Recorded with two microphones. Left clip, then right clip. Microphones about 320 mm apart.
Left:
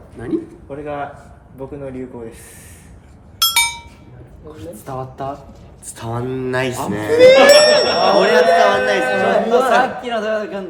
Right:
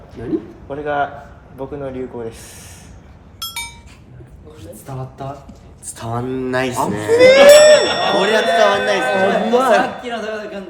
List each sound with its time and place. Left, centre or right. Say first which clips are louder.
0.7 s a man's voice: right 6 dB; centre
3.3 s chink: left 12 dB; centre
4.5 s speech: left 5 dB; left
6.0 s speech: right 1 dB; centre
7.1 s speech: right 1 dB; right
8.1 s speech: left 4 dB; centre
9.1 s speech: left 1 dB; right
10.0 s speech: left 4 dB; left